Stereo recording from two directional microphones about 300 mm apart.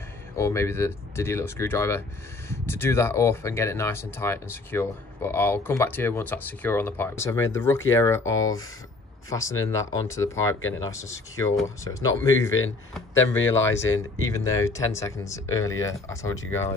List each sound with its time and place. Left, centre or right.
0.4 s speech: centre
13.8 s speech: left
14.3 s speech: centre